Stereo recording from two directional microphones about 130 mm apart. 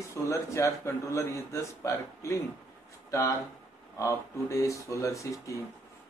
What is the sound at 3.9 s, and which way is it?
Speech, 25° left (ahead or behind).